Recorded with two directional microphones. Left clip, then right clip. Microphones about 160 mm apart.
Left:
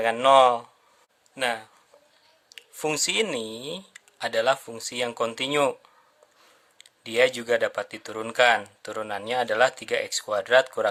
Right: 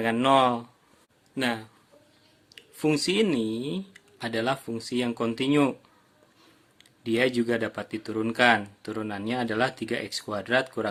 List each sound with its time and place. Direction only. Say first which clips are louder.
0.0 s speech: left 4 dB; 25° left (ahead or behind)
6.7 s speech: left 4 dB; 30° left (ahead or behind)